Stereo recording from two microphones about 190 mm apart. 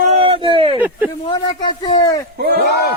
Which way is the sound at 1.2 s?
25° left (ahead or behind).